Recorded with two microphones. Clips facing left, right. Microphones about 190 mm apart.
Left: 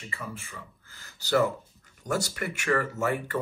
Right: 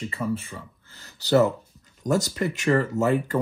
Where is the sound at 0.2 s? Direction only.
35° right (ahead or behind).